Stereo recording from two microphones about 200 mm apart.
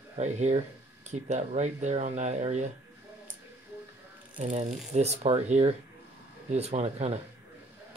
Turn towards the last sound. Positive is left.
turn(degrees=-30)  # may be behind; listen again after turning